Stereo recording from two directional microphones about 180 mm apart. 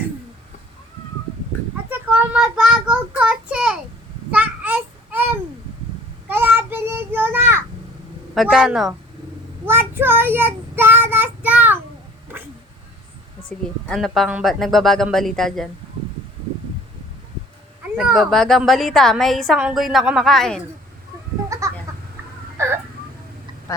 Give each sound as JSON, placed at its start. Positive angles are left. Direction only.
{"t": 1.9, "sound": "child singing", "side_deg": -10}
{"t": 6.2, "sound": "child singing", "side_deg": -10}
{"t": 8.4, "sound": "a woman's voice", "side_deg": -5}
{"t": 9.6, "sound": "child singing", "side_deg": -10}
{"t": 13.8, "sound": "a woman's voice", "side_deg": 0}
{"t": 17.9, "sound": "a woman's voice", "side_deg": 0}
{"t": 21.5, "sound": "goat", "side_deg": -15}
{"t": 21.9, "sound": "chicken", "side_deg": -20}
{"t": 22.5, "sound": "a sound", "side_deg": -15}